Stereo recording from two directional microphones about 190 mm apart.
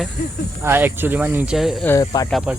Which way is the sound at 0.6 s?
10° right (ahead or behind).